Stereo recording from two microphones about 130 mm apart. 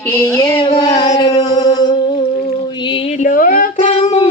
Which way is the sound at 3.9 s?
55° left (ahead or behind).